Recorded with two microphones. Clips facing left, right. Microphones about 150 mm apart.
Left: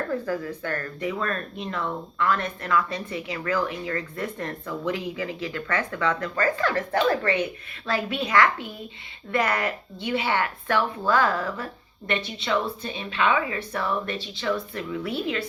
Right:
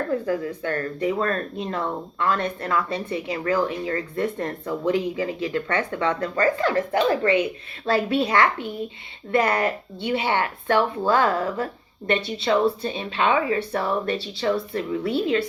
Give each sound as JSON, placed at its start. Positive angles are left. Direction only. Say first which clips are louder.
{"t": 0.1, "sound": "speech", "louder": "right 3 dB", "side_deg": -20}
{"t": 7.9, "sound": "a woman's voice", "louder": "right 6 dB", "side_deg": -35}